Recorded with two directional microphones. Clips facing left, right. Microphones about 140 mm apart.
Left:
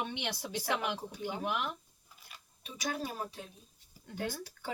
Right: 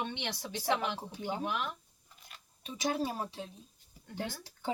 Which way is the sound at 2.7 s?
25° right (ahead or behind).